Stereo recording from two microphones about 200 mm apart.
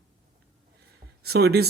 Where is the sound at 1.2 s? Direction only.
50° right (ahead or behind).